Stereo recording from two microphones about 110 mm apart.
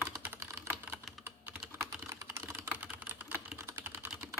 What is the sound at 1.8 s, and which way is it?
Typing, 25° right (ahead or behind).